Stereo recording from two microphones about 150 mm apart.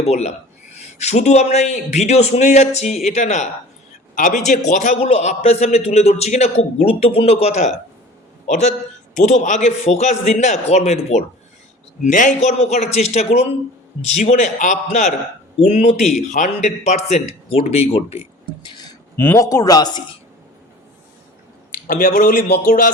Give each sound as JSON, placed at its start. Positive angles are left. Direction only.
{"t": 0.0, "sound": "a man's voice", "side_deg": 45}
{"t": 4.1, "sound": "a man's voice", "side_deg": 60}
{"t": 9.2, "sound": "a man's voice", "side_deg": 55}
{"t": 18.6, "sound": "a sound", "side_deg": 30}
{"t": 19.1, "sound": "speech", "side_deg": 15}
{"t": 21.8, "sound": "a man's voice", "side_deg": 70}